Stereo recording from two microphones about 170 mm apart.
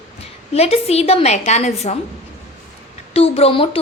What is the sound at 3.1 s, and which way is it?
Speech, 35° left (ahead or behind).